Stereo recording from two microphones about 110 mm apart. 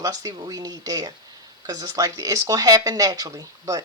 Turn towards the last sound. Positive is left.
turn(degrees=-30)  # may be behind; listen again after turning